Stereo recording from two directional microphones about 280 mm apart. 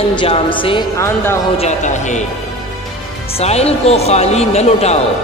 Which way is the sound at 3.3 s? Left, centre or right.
Left.